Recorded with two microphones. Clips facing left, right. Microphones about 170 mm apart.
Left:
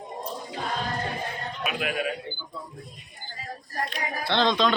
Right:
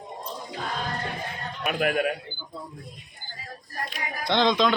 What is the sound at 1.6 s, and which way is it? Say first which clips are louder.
Speech: right 5 dB; 50° right (ahead or behind).